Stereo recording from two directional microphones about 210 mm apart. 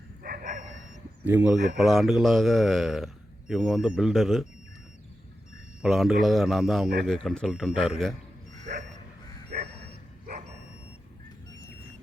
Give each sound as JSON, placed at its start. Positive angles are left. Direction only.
{"t": 0.2, "sound": "bow-wow", "side_deg": -45}
{"t": 1.2, "sound": "speech", "side_deg": -10}
{"t": 1.5, "sound": "speech", "side_deg": -35}
{"t": 1.8, "sound": "speech", "side_deg": 0}
{"t": 5.8, "sound": "speech", "side_deg": 0}